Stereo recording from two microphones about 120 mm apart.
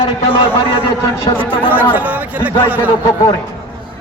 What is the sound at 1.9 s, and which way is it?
Speech, 15° right (ahead or behind).